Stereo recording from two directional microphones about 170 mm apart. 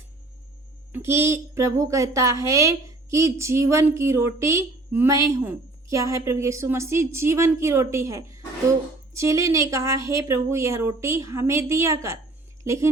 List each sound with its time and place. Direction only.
0.9 s a woman's voice: 15° right (ahead or behind)